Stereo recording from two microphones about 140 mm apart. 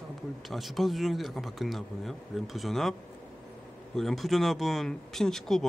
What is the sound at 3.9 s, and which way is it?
Speech, centre (ahead or behind).